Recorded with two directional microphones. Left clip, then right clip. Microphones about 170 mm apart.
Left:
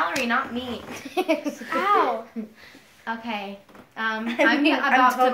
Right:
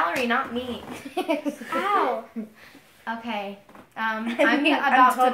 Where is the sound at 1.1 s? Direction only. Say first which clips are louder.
Left 2 dB; 25° left (ahead or behind).